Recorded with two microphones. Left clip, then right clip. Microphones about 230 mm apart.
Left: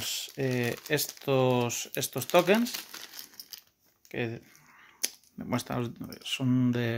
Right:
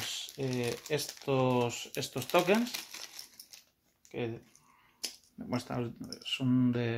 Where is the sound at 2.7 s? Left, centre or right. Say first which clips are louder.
Left 2 dB; centre.